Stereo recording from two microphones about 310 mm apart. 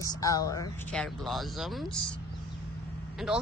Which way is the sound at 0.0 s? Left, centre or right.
Centre.